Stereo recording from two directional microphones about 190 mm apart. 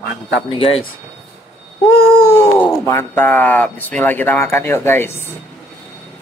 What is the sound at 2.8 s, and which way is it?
Speech, 10° left (ahead or behind).